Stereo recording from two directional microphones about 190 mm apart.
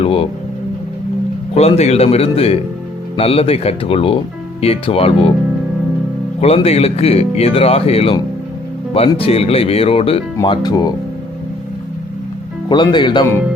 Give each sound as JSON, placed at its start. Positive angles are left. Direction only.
{"t": 0.0, "sound": "speech", "side_deg": 30}
{"t": 1.5, "sound": "speech", "side_deg": 35}
{"t": 6.4, "sound": "speech", "side_deg": 30}
{"t": 12.6, "sound": "speech", "side_deg": 25}